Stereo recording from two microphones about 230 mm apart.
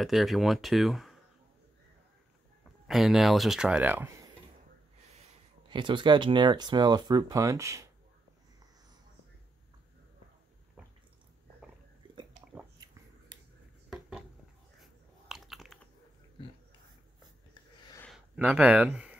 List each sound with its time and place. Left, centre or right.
0.0 s speech: centre
2.9 s speech: centre
5.1 s speech: right
13.8 s a sound: centre
14.8 s biting: centre
18.0 s a sound: centre